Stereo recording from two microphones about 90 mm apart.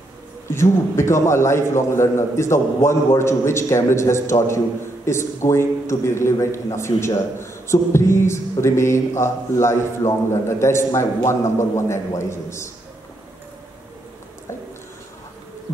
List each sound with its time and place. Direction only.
0.5 s a man's voice: 30° left (ahead or behind)